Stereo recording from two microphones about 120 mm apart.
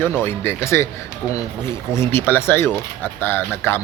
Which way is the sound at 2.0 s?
20° left (ahead or behind).